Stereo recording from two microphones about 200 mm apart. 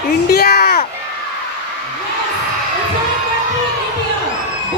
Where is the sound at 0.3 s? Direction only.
50° left (ahead or behind).